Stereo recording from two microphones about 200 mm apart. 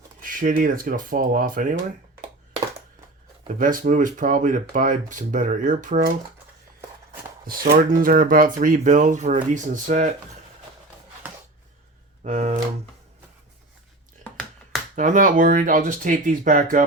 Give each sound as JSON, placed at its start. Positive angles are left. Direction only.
{"t": 0.2, "sound": "speech", "side_deg": -45}
{"t": 3.4, "sound": "speech", "side_deg": -40}
{"t": 7.4, "sound": "speech", "side_deg": -45}
{"t": 12.2, "sound": "speech", "side_deg": -35}
{"t": 14.9, "sound": "speech", "side_deg": -40}